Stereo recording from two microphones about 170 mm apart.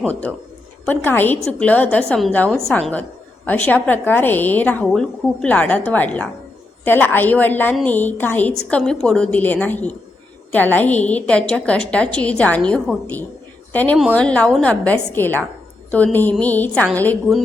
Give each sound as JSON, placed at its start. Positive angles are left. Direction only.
{"t": 0.1, "sound": "a woman's voice", "side_deg": 10}